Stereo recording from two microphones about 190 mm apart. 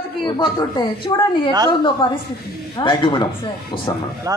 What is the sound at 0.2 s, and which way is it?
A woman's voice, 25° left (ahead or behind).